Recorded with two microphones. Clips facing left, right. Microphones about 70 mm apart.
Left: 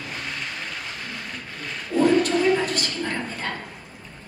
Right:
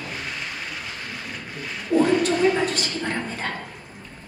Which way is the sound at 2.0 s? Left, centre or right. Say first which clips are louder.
Left 1 dB; centre.